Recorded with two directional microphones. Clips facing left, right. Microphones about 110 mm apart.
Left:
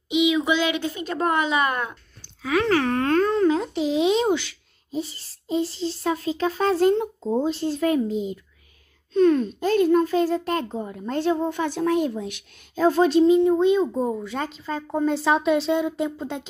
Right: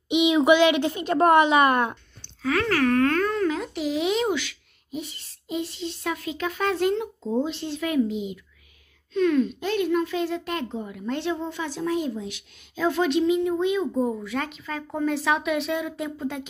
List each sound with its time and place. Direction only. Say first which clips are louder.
0.5 s a woman's voice: right 5 dB; 50° right (ahead or behind)
2.2 s speech: left 2 dB; 15° left (ahead or behind); by 12.8 s 55° left (ahead or behind)
12.8 s speech: left 5 dB; 35° left (ahead or behind)